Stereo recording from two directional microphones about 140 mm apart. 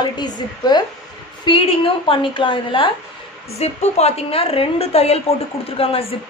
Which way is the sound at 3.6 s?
50° left (ahead or behind).